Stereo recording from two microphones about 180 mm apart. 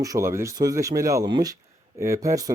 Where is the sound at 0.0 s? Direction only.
15° right (ahead or behind).